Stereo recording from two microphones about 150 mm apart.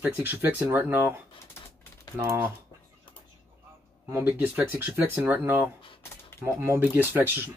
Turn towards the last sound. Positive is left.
turn(degrees=-10)  # may be behind; listen again after turning